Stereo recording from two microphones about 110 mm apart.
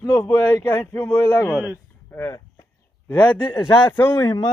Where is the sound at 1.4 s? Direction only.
25° left (ahead or behind).